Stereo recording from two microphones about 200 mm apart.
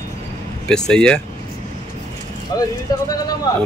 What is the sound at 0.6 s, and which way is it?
Speech, 5° left (ahead or behind).